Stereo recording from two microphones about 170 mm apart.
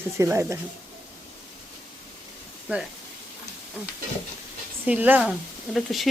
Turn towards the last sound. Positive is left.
turn(degrees=0)  # may be behind; listen again after turning